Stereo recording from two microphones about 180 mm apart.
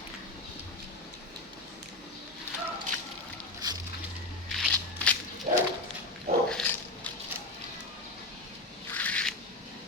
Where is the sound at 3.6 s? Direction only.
20° right (ahead or behind).